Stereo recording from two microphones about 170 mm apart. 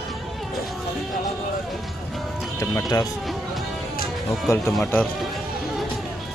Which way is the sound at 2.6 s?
15° left (ahead or behind).